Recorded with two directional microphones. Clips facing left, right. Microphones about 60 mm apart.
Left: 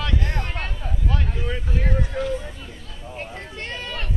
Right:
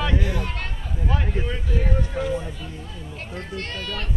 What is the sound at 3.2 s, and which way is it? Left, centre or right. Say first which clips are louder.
Speech: right 1 dB; centre.